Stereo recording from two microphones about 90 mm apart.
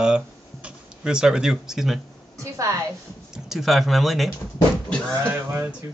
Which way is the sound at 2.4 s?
35° right (ahead or behind).